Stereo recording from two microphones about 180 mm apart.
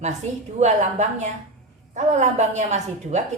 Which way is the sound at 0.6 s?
40° right (ahead or behind).